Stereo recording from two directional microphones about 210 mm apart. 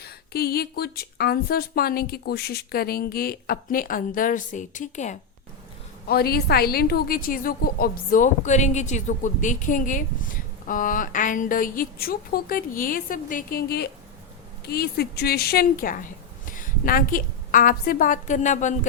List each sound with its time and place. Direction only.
0.0 s speech: 45° left (ahead or behind)
6.1 s a woman's voice: 45° left (ahead or behind)